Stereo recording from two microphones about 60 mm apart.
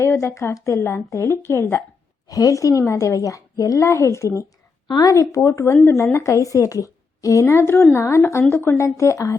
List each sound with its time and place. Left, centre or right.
0.0 s a woman's voice: left
2.2 s speech: left
4.9 s speech: left
5.4 s a woman's voice: left